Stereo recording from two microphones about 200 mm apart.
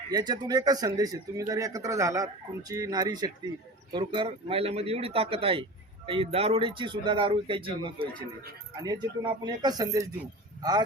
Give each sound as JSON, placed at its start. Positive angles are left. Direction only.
{"t": 0.1, "sound": "speech", "side_deg": -20}